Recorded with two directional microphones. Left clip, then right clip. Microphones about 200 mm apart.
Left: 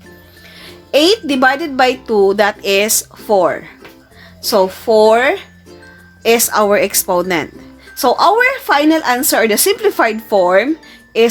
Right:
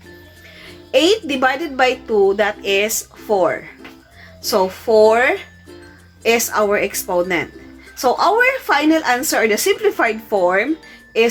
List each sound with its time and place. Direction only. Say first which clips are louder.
0.6 s a woman's voice: left 3 dB; 40° left (ahead or behind)